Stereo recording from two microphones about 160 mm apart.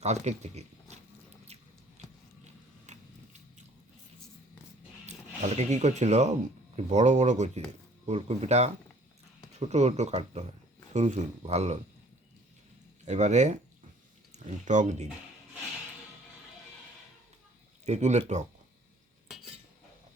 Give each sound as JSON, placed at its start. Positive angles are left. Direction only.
{"t": 0.0, "sound": "speech", "side_deg": -45}
{"t": 1.5, "sound": "a sound", "side_deg": -45}
{"t": 2.9, "sound": "a sound", "side_deg": -45}
{"t": 5.0, "sound": "speech", "side_deg": -45}
{"t": 13.1, "sound": "speech", "side_deg": -45}
{"t": 17.8, "sound": "speech", "side_deg": -45}